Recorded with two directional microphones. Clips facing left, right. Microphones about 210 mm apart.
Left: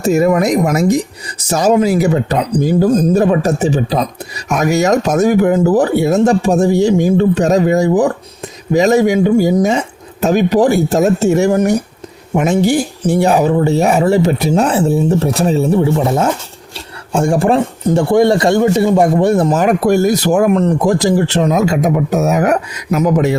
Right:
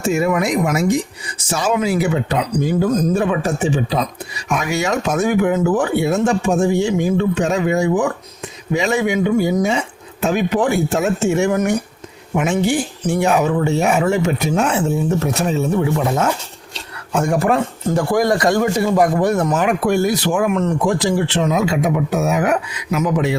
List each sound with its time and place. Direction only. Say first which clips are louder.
0.0 s speech: left 6 dB; 40° left (ahead or behind)